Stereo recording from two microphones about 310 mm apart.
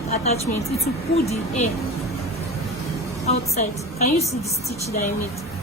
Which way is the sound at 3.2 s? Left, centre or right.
Left.